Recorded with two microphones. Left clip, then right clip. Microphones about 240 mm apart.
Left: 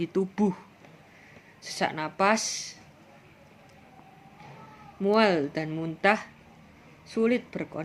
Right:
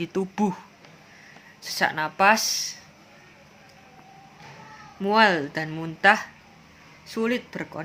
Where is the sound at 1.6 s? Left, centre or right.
Right.